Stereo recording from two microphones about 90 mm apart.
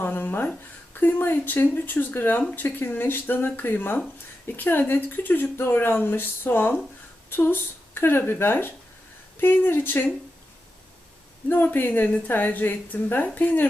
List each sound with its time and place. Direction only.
0.0 s a sound: 20° left (ahead or behind)
0.9 s speech: 20° left (ahead or behind)
11.4 s speech: 20° left (ahead or behind)